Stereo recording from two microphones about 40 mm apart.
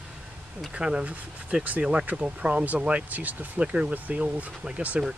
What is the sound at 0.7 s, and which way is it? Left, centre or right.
Speech, right.